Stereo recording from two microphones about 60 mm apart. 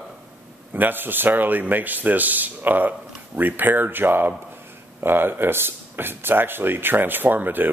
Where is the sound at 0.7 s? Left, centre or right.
Right.